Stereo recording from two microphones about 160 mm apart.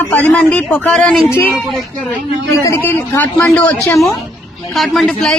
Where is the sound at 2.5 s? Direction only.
20° left (ahead or behind).